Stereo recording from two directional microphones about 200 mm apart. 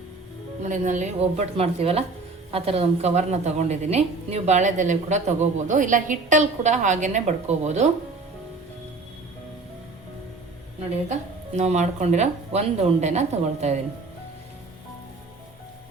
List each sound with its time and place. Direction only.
0.6 s a woman's voice: 40° right (ahead or behind)
11.1 s a woman's voice: 35° right (ahead or behind)